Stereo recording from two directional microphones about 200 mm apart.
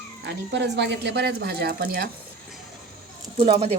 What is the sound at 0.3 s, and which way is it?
Speech, 60° right (ahead or behind).